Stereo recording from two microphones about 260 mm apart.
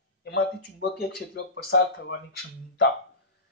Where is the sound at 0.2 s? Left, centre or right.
Left.